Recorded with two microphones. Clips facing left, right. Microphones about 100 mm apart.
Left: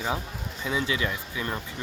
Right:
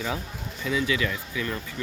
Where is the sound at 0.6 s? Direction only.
25° left (ahead or behind).